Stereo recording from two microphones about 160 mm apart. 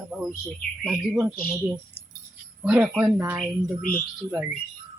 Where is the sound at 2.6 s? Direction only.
5° right (ahead or behind).